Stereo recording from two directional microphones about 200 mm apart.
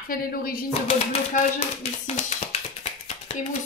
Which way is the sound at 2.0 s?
30° left (ahead or behind).